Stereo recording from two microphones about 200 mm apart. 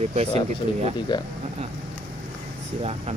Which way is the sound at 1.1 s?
20° left (ahead or behind).